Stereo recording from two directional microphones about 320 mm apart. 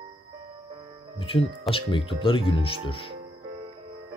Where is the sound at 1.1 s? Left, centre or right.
Centre.